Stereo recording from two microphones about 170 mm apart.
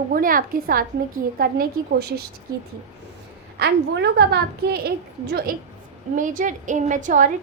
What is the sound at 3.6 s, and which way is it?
A woman's voice, 80° right.